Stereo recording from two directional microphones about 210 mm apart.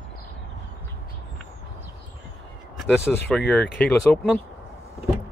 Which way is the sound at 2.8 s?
Centre (ahead or behind).